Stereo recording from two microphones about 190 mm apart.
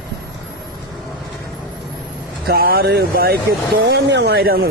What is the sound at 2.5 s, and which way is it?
Speech, 50° right (ahead or behind).